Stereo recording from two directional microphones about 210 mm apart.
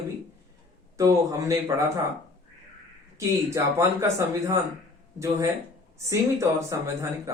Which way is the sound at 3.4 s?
15° right (ahead or behind).